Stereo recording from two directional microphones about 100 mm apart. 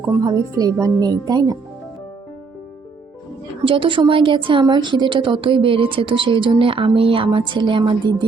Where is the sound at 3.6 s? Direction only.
60° right (ahead or behind).